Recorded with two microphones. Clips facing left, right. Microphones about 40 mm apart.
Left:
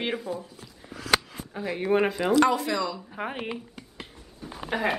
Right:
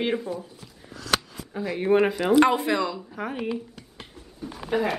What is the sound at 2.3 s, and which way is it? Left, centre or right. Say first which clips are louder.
Speech: right 3 dB; right.